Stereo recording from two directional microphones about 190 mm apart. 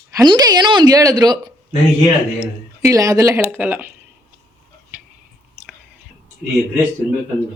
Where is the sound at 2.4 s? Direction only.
15° right (ahead or behind).